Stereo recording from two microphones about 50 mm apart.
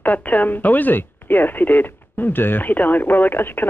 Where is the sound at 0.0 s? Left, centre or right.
Left.